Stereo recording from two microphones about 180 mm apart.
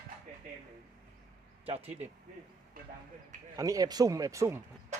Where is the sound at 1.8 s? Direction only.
10° right (ahead or behind).